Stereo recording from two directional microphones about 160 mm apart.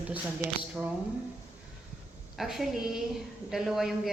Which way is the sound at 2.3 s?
Centre (ahead or behind).